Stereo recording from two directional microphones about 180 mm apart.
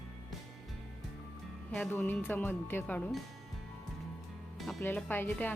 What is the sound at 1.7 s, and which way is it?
A woman's voice, 10° left (ahead or behind).